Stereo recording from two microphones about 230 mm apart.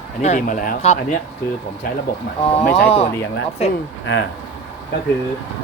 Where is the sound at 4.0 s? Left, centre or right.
Left.